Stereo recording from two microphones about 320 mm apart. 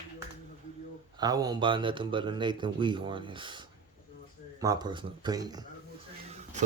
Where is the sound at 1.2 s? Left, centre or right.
Centre.